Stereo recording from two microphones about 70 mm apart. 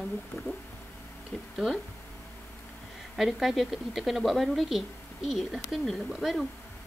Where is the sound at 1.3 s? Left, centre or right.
Centre.